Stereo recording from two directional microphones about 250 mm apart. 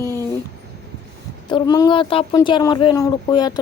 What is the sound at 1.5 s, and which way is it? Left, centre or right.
Speech, centre.